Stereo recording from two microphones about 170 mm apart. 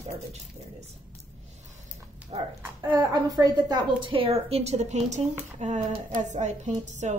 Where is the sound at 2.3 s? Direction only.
35° right (ahead or behind).